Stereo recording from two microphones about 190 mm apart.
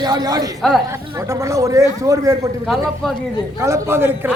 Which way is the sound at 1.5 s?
15° right (ahead or behind).